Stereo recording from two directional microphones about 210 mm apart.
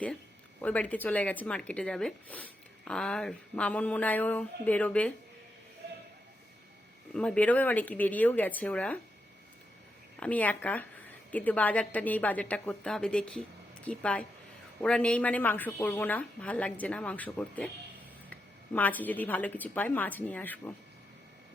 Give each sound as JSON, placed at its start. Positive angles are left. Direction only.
{"t": 0.6, "sound": "speech", "side_deg": 5}
{"t": 7.1, "sound": "speech", "side_deg": 5}
{"t": 10.2, "sound": "speech", "side_deg": 5}